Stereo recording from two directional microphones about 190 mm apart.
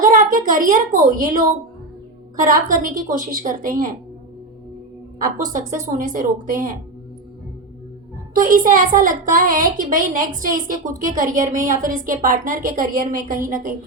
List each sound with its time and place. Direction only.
0.0 s a child's voice: 45° right (ahead or behind)
5.4 s a woman's voice: 45° right (ahead or behind)
8.4 s a woman's voice: 45° right (ahead or behind)